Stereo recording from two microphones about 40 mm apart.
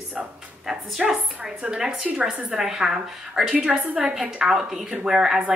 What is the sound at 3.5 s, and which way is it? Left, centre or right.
Speech, right.